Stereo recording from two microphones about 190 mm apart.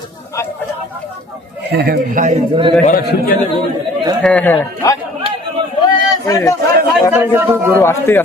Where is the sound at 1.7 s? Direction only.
55° right (ahead or behind).